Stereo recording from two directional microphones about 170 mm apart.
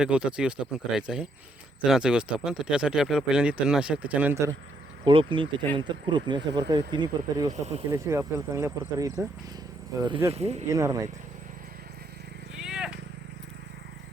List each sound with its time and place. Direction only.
0.0 s speech: 5° right (ahead or behind)
5.0 s speech: 30° right (ahead or behind)
10.3 s speech: 40° right (ahead or behind)
10.7 s speech: 20° right (ahead or behind)
12.5 s a sound: 5° right (ahead or behind)